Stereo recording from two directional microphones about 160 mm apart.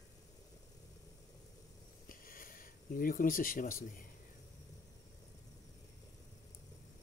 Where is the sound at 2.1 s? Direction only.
65° left (ahead or behind).